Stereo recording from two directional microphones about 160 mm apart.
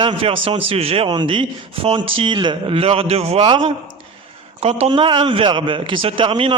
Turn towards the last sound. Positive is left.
turn(degrees=-30)  # may be behind; listen again after turning